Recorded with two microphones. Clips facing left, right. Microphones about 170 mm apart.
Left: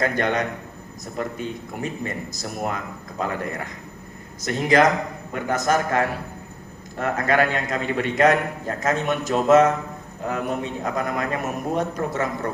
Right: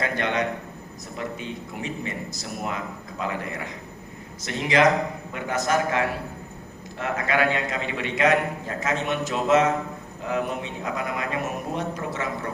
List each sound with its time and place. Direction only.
0.0 s a man's voice: 45° left (ahead or behind)